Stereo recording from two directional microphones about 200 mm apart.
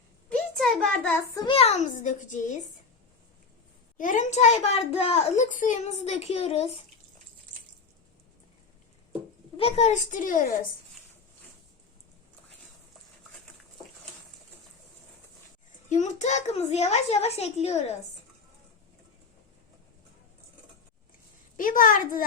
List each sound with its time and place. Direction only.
0.3 s a sound: 5° left (ahead or behind)
1.5 s a child's voice: 30° left (ahead or behind)
3.9 s a child's voice: 40° left (ahead or behind)
9.6 s a child's voice: 30° left (ahead or behind)
15.9 s a child's voice: 35° left (ahead or behind)
21.5 s a woman's voice: 45° left (ahead or behind)